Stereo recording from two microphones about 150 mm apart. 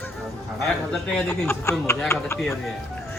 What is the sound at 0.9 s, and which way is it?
Speech, 10° left (ahead or behind).